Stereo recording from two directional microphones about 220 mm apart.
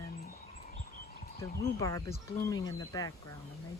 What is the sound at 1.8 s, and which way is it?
Speech, 15° left (ahead or behind).